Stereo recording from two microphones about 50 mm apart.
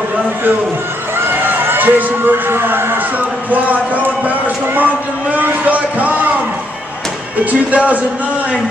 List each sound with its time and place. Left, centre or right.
1.2 s speech: right
3.4 s speech: right
5.3 s a sound: right
7.3 s speech: right